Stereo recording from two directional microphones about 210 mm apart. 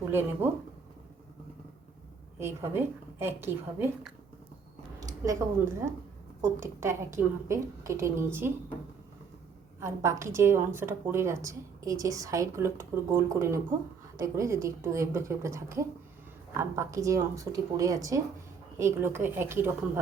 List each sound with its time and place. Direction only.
0.0 s a woman's voice: 10° right (ahead or behind)
2.4 s a woman's voice: 10° right (ahead or behind)
9.8 s a woman's voice: 15° right (ahead or behind)